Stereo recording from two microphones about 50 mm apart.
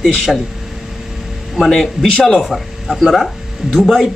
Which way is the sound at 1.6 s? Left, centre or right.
Centre.